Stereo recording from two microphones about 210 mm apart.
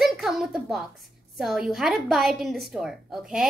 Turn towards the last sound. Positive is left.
turn(degrees=-5)  # may be behind; listen again after turning